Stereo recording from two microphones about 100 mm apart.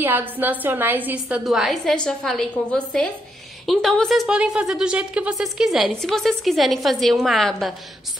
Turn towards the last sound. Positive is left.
turn(degrees=0)  # may be behind; listen again after turning